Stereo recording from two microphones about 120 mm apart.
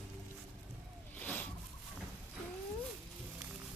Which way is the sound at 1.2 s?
15° left (ahead or behind).